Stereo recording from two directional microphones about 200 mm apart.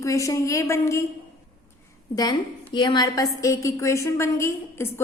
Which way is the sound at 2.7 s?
20° left (ahead or behind).